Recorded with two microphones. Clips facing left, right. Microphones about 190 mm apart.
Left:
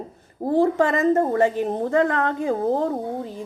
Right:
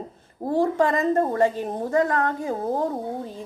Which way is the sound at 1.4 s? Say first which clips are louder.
Left 2 dB; 15° left (ahead or behind).